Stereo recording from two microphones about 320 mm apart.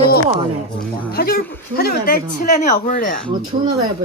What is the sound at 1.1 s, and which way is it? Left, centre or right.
A woman's voice, left.